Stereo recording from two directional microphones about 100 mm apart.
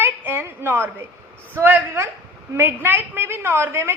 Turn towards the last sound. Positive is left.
turn(degrees=-25)  # may be behind; listen again after turning